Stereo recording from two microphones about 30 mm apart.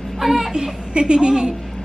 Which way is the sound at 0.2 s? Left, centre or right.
Centre.